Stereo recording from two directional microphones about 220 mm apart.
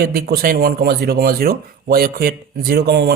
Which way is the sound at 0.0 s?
45° right (ahead or behind).